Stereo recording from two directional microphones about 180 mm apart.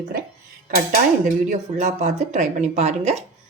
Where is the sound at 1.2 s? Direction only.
40° right (ahead or behind).